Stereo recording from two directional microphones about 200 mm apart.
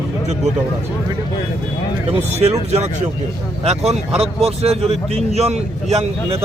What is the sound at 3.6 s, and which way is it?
A man's voice, 30° right (ahead or behind).